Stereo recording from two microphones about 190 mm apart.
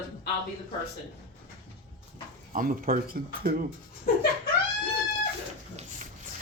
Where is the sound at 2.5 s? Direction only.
50° right (ahead or behind).